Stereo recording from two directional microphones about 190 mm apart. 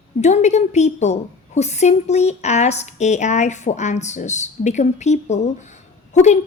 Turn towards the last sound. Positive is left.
turn(degrees=40)  # may be behind; listen again after turning